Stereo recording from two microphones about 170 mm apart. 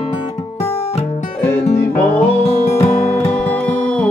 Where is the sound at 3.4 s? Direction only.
5° left (ahead or behind).